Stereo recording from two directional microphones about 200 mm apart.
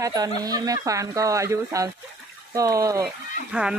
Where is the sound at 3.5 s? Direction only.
5° right (ahead or behind).